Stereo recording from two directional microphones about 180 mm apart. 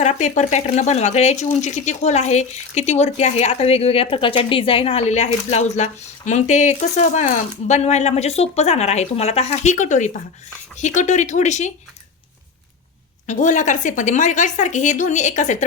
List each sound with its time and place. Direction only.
0.0 s speech: 40° left (ahead or behind)
13.2 s speech: 45° left (ahead or behind)